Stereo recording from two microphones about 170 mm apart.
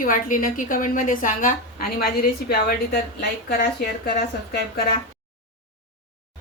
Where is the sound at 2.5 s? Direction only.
65° left (ahead or behind).